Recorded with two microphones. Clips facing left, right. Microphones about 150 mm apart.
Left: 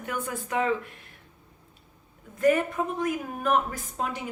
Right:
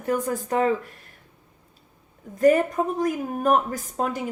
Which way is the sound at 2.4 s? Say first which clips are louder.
Right 5 dB; 40° right (ahead or behind).